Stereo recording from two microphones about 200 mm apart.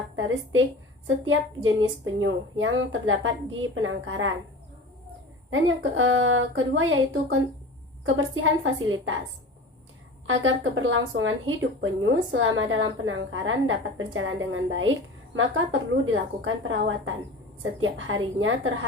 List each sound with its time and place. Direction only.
0.2 s a woman's voice: 75° right (ahead or behind)
5.5 s a woman's voice: 80° right
10.2 s a woman's voice: 75° right (ahead or behind)